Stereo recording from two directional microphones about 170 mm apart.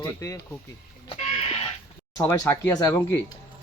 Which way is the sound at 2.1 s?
10° left (ahead or behind).